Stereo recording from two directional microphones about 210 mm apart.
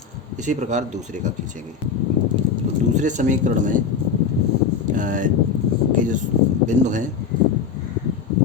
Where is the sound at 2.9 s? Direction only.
35° right (ahead or behind).